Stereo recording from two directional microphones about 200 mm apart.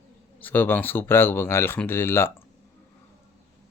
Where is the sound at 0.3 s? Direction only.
10° left (ahead or behind).